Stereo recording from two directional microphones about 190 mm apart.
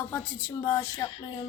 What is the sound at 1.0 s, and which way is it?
Speech, 25° left (ahead or behind).